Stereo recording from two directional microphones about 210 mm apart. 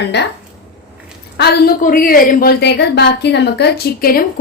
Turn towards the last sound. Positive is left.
turn(degrees=45)  # may be behind; listen again after turning